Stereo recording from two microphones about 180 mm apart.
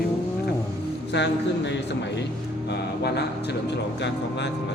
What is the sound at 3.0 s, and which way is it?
A man's voice, 70° left (ahead or behind).